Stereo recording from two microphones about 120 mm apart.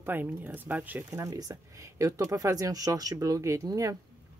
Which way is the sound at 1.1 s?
30° right (ahead or behind).